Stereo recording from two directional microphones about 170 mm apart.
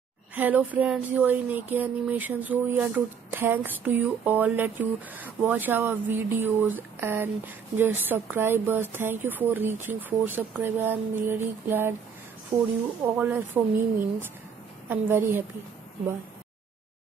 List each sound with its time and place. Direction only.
0.3 s speech: 10° right (ahead or behind)